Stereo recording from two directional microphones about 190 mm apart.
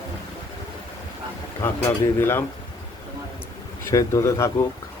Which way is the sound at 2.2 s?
10° left (ahead or behind).